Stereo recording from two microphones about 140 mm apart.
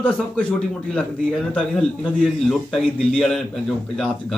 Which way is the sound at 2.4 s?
Centre (ahead or behind).